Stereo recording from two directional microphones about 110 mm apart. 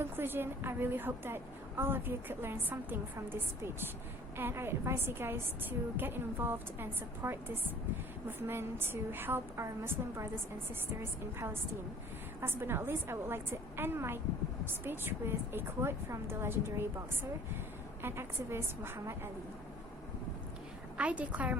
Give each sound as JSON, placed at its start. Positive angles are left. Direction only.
{"t": 0.0, "sound": "a woman's voice", "side_deg": -20}
{"t": 21.0, "sound": "a woman's voice", "side_deg": -15}